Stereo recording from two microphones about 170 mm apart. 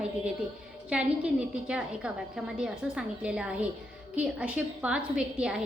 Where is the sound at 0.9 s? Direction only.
5° right (ahead or behind).